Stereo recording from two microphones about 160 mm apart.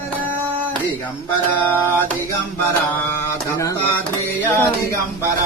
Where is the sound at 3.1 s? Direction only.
15° left (ahead or behind).